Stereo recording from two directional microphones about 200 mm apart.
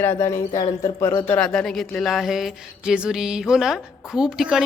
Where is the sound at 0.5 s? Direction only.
30° left (ahead or behind).